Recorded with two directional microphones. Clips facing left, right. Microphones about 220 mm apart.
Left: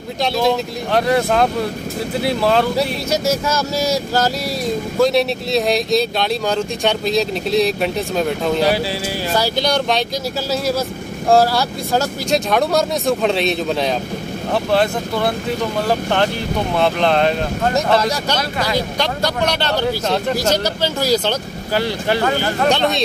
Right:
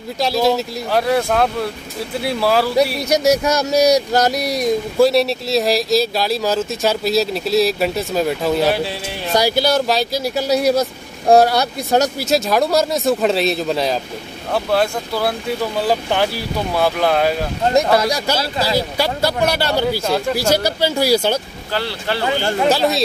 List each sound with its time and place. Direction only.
0.2 s speech: centre (ahead or behind)
3.1 s speech: 15° right (ahead or behind)
5.0 s speech: centre (ahead or behind)
10.5 s speech: 15° right (ahead or behind)
12.3 s speech: centre (ahead or behind)
21.7 s speech: 15° left (ahead or behind)
22.7 s speech: 5° right (ahead or behind)